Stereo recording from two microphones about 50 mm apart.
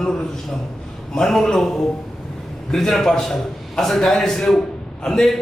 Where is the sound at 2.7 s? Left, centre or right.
Centre.